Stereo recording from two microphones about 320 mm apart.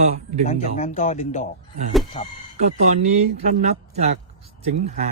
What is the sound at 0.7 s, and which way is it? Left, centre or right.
Speech, centre.